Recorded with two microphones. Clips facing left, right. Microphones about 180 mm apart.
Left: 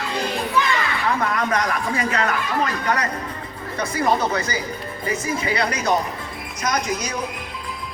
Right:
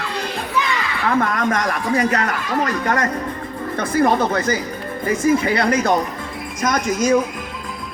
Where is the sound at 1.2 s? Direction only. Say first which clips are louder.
Right 3 dB; 50° right (ahead or behind).